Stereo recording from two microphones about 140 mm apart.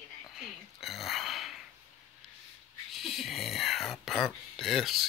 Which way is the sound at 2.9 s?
Centre (ahead or behind).